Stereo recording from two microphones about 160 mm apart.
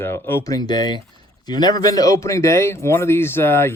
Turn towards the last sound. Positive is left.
turn(degrees=15)  # may be behind; listen again after turning